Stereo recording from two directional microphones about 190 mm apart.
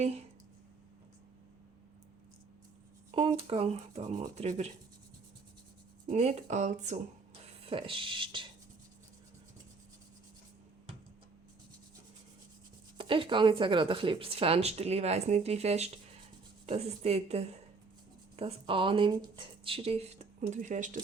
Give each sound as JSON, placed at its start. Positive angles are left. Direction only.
{"t": 3.4, "sound": "speech", "side_deg": -30}
{"t": 6.1, "sound": "speech", "side_deg": -35}
{"t": 13.0, "sound": "speech", "side_deg": -25}